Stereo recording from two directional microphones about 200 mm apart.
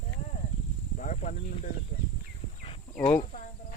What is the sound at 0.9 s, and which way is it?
Snake, 35° left (ahead or behind).